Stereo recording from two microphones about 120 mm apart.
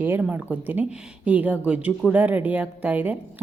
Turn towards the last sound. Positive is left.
turn(degrees=-10)  # may be behind; listen again after turning